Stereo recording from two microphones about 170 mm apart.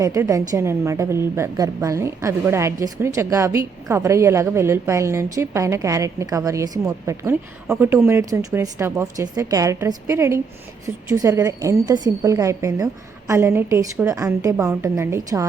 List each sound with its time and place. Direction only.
0.0 s a woman's voice: 20° right (ahead or behind)